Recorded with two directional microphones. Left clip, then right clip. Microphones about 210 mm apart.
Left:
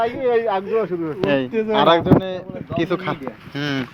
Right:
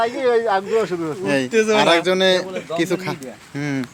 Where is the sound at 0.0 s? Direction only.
5° right (ahead or behind).